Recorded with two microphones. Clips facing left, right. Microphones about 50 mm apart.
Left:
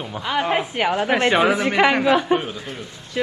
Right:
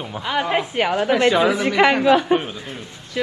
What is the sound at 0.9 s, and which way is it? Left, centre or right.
Speech, left.